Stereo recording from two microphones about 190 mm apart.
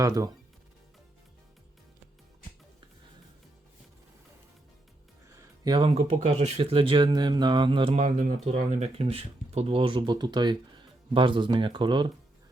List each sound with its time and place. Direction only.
0.0 s speech: 15° right (ahead or behind)
5.3 s speech: 20° right (ahead or behind)